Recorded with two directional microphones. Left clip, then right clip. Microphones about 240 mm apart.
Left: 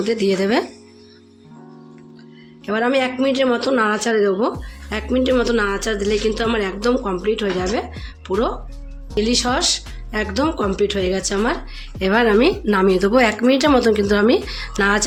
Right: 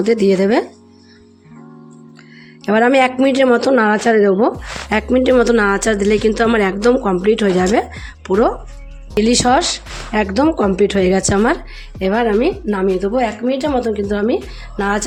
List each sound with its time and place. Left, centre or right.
0.0 s a woman's voice: right
2.6 s a woman's voice: right
9.1 s a woman's voice: right
11.9 s a woman's voice: centre
12.2 s speech: centre